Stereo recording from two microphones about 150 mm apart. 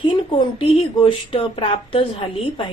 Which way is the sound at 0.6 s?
35° left (ahead or behind).